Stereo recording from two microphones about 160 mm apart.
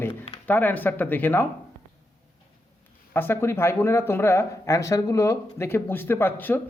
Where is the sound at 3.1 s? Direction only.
15° left (ahead or behind).